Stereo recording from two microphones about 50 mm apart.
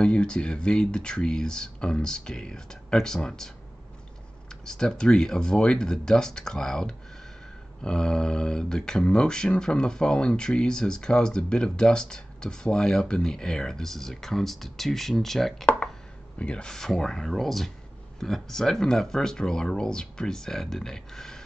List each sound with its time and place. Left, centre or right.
0.0 s speech: centre
16.3 s speech: left
16.7 s speech: centre